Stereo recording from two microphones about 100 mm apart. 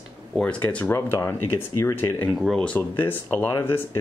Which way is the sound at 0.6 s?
20° left (ahead or behind).